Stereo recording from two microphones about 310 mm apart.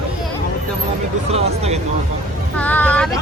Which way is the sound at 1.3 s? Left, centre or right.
Centre.